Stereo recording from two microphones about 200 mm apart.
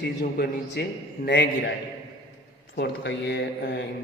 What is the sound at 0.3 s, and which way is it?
Speech, 55° left (ahead or behind).